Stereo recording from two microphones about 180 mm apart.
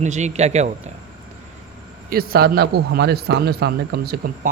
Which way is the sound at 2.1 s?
55° right (ahead or behind).